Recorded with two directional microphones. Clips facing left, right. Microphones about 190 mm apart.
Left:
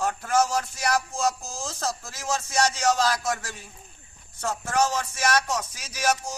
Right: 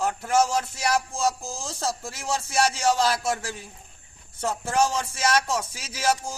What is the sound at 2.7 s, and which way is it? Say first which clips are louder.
Speech: right 1 dB; 25° right (ahead or behind).